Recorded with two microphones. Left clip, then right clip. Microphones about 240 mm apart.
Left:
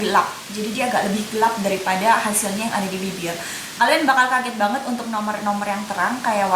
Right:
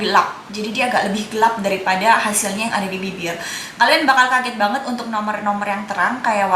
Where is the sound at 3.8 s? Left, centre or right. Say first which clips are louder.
Right 3 dB; centre.